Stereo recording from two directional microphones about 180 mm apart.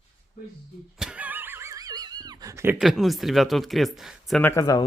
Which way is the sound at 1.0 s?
5° right (ahead or behind).